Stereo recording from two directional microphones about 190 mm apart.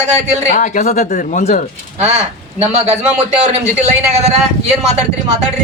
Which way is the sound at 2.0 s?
35° right (ahead or behind).